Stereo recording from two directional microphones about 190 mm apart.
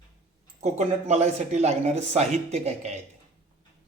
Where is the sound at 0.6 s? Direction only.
35° right (ahead or behind).